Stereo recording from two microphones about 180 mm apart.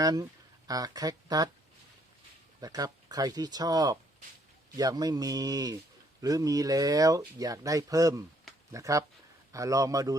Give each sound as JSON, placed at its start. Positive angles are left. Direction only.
{"t": 0.0, "sound": "speech", "side_deg": -20}
{"t": 2.6, "sound": "speech", "side_deg": -20}